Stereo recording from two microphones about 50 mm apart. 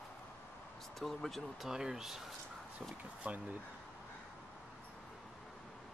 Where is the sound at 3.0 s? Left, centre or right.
Right.